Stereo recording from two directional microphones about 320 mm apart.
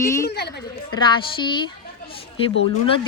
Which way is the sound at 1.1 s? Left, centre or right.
Centre.